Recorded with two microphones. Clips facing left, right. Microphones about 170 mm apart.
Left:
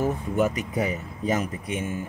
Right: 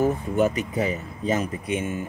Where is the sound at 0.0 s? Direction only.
25° right (ahead or behind).